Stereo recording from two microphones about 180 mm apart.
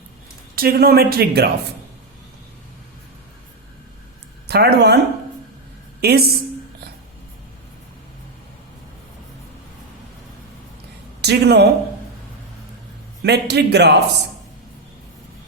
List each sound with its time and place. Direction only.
0.5 s speech: 55° right (ahead or behind)
4.4 s speech: 65° right (ahead or behind)
6.0 s speech: 60° right (ahead or behind)
11.2 s speech: 65° right (ahead or behind)
13.2 s speech: 65° right (ahead or behind)